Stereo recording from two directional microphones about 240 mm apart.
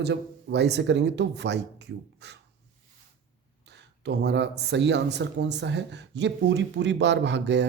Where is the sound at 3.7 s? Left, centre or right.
Right.